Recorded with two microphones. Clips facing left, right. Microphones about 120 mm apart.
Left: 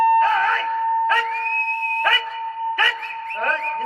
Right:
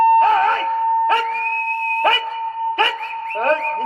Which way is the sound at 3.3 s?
25° right (ahead or behind).